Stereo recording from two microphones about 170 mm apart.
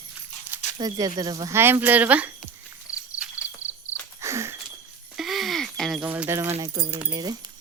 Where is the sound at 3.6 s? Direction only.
45° left (ahead or behind).